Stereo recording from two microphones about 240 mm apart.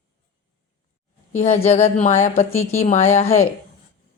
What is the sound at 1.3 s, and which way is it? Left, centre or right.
Speech, left.